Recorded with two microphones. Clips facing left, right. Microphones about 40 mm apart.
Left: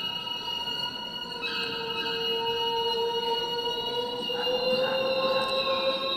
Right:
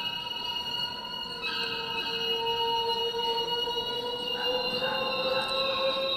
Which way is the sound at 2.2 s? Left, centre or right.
Centre.